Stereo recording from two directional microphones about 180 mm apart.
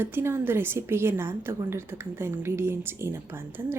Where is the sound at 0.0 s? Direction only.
10° right (ahead or behind).